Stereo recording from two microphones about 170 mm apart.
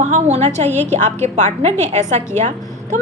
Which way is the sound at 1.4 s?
45° right (ahead or behind).